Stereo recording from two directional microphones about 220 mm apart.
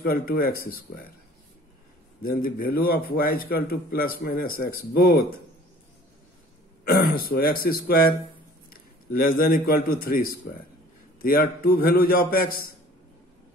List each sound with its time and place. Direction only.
0.0 s speech: 45° left (ahead or behind)
2.2 s a man's voice: 40° left (ahead or behind)
6.8 s a man's voice: 45° left (ahead or behind)
11.6 s a man's voice: 40° left (ahead or behind)